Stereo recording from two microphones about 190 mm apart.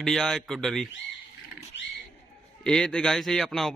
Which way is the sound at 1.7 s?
65° left (ahead or behind).